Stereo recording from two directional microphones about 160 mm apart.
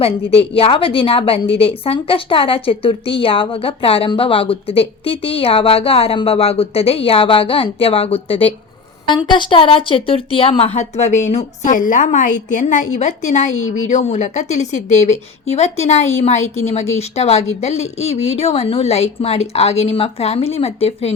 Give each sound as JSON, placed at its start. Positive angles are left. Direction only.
{"t": 0.0, "sound": "a woman's voice", "side_deg": 35}